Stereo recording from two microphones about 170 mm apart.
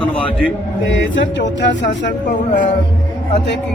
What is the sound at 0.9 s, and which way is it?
Speech, 90° left.